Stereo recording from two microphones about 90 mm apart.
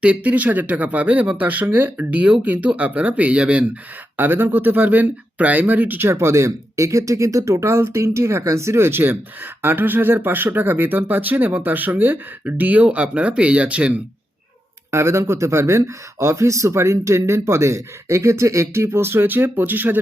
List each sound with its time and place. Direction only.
0.0 s speech: 15° right (ahead or behind)
14.8 s speech: 30° right (ahead or behind)